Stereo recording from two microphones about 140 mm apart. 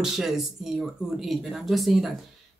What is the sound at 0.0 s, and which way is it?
Speech, 5° right (ahead or behind).